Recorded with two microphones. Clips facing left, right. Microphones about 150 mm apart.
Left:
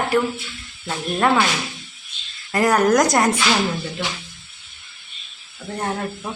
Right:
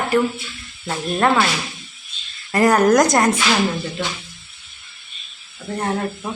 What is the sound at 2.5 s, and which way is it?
Speech, centre (ahead or behind).